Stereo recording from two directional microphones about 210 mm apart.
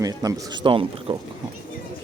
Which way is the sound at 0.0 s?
15° right (ahead or behind).